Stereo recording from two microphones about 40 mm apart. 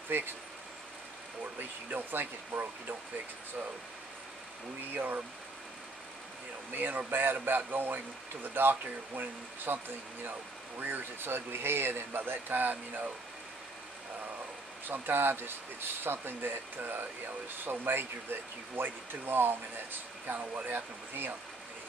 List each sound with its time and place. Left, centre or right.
0.1 s speech: right
1.4 s speech: right
4.9 s speech: right
6.7 s speech: right
14.9 s speech: right
20.3 s speech: right
20.7 s speech: right